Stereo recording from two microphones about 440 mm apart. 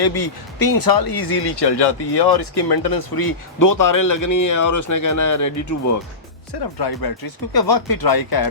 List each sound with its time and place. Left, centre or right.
0.0 s speech: left
6.5 s speech: left